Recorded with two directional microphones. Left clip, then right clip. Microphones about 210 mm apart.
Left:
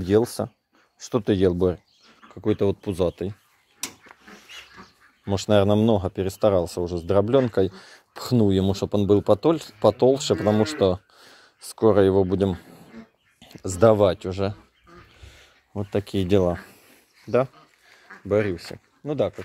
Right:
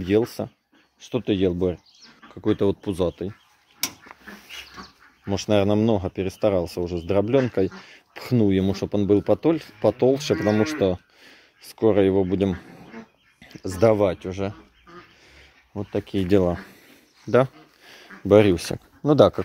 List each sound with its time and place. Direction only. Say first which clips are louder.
0.0 s speech: left 1 dB; 20° left (ahead or behind)
2.3 s speech: right 1 dB; 15° left (ahead or behind)
5.2 s speech: left 1 dB; 20° left (ahead or behind)
15.2 s a sound: right 1 dB; 25° left (ahead or behind)
16.3 s speech: right 1 dB; 15° left (ahead or behind)
17.3 s speech: right 3 dB; centre (ahead or behind)
18.3 s speech: right 7 dB; 25° right (ahead or behind)